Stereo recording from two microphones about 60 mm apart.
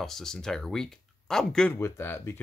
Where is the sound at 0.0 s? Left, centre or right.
Centre.